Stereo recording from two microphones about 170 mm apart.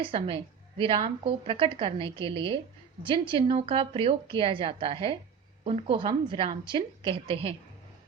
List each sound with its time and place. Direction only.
0.0 s a woman's voice: 30° right (ahead or behind)